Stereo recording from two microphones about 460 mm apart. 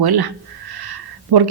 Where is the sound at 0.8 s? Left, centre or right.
Right.